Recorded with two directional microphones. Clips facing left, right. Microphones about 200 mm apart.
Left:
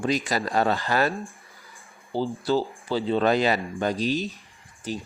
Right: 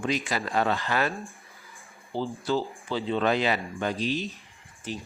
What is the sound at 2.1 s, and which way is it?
Speech, 35° left (ahead or behind).